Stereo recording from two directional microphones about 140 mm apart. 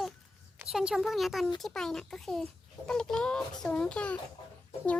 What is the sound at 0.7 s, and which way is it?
A child's voice, 5° right (ahead or behind).